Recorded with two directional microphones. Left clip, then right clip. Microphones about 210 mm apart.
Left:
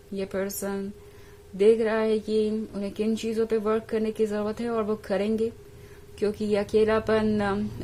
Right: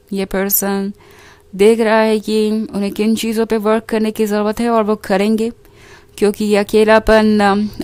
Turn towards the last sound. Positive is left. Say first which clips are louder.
# right 13 dB
turn(degrees=-45)  # may be behind; listen again after turning